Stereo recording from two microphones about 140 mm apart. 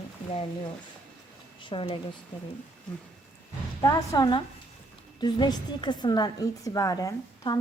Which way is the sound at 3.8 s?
30° left (ahead or behind).